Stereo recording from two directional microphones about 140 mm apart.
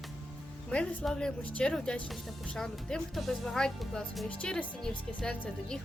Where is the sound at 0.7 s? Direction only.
5° left (ahead or behind).